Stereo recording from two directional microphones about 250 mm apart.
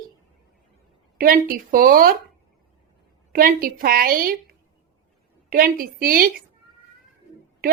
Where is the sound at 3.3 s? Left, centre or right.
Right.